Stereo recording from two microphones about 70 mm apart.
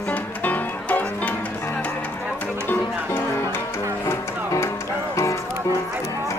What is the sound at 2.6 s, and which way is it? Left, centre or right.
Music, left.